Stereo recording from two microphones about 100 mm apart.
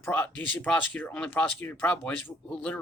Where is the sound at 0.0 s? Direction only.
15° left (ahead or behind).